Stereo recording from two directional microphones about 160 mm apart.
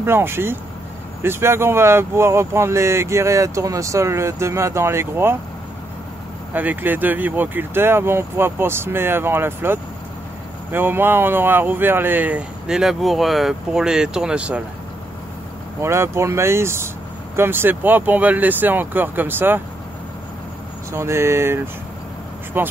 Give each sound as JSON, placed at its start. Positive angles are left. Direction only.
{"t": 0.0, "sound": "speech", "side_deg": -15}
{"t": 6.5, "sound": "speech", "side_deg": -10}
{"t": 15.8, "sound": "speech", "side_deg": -15}
{"t": 20.9, "sound": "speech", "side_deg": -15}